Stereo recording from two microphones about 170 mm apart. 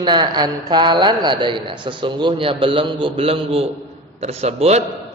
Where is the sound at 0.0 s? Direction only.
25° right (ahead or behind).